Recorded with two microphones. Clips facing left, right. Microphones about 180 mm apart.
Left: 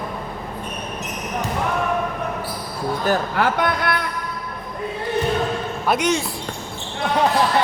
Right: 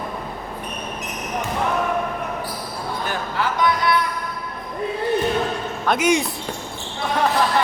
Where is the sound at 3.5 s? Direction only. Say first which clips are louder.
Right 2 dB; 55° left (ahead or behind).